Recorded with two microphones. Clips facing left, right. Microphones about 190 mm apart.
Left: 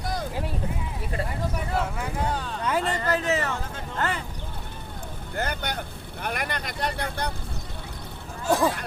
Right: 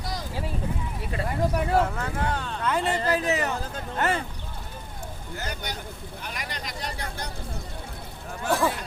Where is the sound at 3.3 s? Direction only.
15° right (ahead or behind).